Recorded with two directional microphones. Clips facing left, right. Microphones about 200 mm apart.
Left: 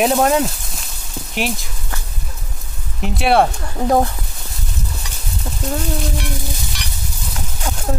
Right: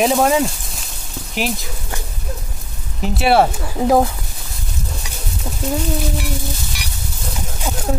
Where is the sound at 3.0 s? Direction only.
Centre (ahead or behind).